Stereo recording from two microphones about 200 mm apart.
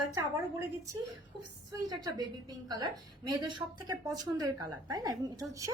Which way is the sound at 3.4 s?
20° right (ahead or behind).